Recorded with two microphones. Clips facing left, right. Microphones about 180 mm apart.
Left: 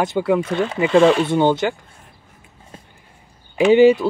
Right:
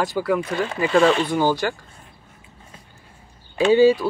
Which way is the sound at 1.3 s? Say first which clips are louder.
Left 4 dB; 25° left (ahead or behind).